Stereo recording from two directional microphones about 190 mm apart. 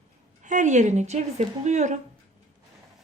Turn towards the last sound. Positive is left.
turn(degrees=-40)  # may be behind; listen again after turning